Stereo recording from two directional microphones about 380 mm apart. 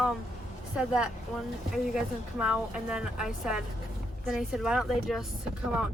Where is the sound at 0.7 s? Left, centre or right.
Centre.